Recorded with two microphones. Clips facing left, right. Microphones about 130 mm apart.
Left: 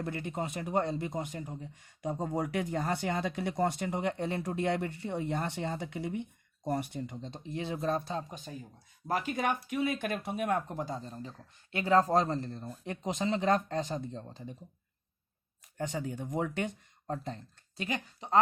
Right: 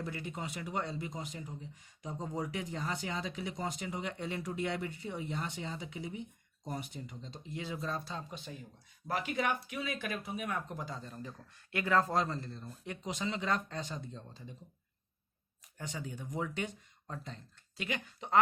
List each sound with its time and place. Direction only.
0.0 s speech: 50° left (ahead or behind)
10.3 s speech: 45° left (ahead or behind)
15.8 s speech: 45° left (ahead or behind)